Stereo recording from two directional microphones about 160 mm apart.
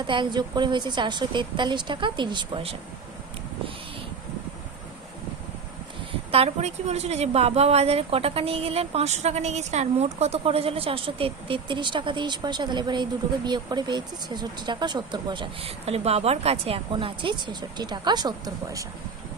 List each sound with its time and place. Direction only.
0.0 s a woman's voice: 30° right (ahead or behind)
6.3 s a woman's voice: 40° right (ahead or behind); by 18.9 s 20° right (ahead or behind)